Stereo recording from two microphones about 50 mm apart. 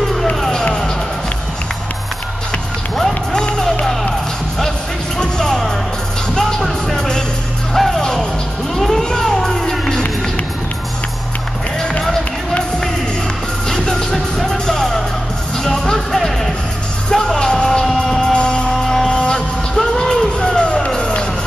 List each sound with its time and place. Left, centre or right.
0.4 s music: centre
3.3 s music: centre
5.2 s music: centre
8.7 s crowd: centre
13.7 s music: centre